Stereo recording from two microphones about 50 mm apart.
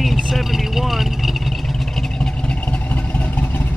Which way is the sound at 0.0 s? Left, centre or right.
Centre.